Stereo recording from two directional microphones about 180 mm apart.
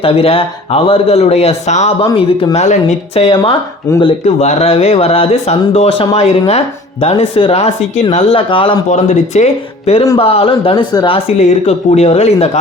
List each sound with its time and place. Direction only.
0.0 s speech: 30° left (ahead or behind)
3.2 s speech: 30° left (ahead or behind)
8.9 s speech: 40° left (ahead or behind)